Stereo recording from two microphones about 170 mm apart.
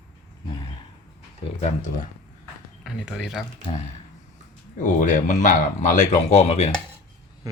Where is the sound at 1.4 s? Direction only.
30° left (ahead or behind).